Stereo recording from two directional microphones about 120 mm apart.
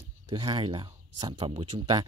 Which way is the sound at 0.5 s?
45° right (ahead or behind).